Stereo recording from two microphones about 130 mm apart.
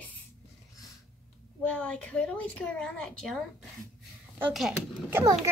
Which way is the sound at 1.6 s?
10° left (ahead or behind).